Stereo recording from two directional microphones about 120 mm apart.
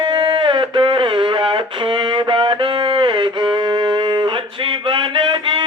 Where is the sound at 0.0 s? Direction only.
40° right (ahead or behind).